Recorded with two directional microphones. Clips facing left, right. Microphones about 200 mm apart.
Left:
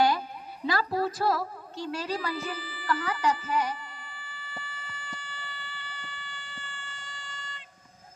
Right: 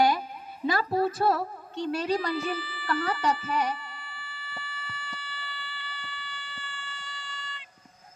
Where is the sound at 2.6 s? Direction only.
40° left (ahead or behind).